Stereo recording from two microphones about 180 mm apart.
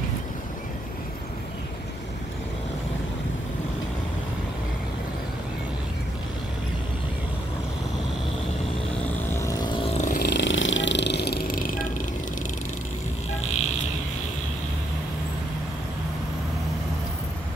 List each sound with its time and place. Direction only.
9.3 s vehicle: 15° left (ahead or behind); by 10.1 s 35° left (ahead or behind)
10.1 s vehicle: 65° left (ahead or behind)